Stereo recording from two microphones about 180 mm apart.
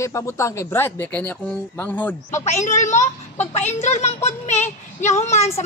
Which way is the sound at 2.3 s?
40° left (ahead or behind).